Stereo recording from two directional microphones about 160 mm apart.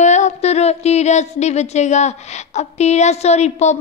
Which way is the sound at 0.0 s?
45° left (ahead or behind).